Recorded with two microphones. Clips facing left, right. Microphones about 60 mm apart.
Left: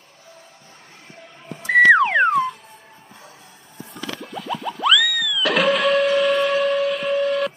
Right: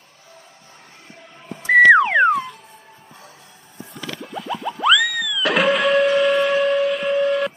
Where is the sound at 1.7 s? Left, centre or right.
Centre.